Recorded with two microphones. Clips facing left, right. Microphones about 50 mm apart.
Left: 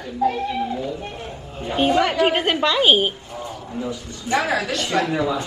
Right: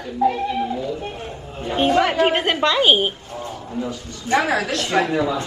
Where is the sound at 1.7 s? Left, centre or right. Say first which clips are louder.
Right 1 dB; centre.